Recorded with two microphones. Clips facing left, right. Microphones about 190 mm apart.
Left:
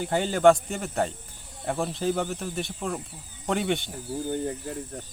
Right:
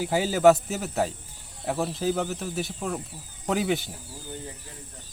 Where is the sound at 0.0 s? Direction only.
5° right (ahead or behind).